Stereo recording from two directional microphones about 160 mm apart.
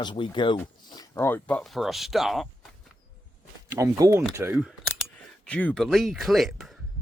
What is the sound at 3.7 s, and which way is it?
Speech, 20° right (ahead or behind).